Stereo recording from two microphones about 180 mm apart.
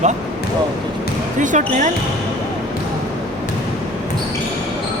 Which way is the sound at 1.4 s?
45° right (ahead or behind).